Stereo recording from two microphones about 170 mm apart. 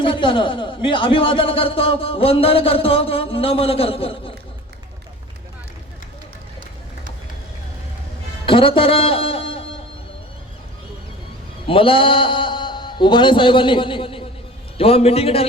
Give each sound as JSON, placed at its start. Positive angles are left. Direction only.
{"t": 0.0, "sound": "speech", "side_deg": 30}
{"t": 8.4, "sound": "a man's voice", "side_deg": 30}
{"t": 11.6, "sound": "a man's voice", "side_deg": 30}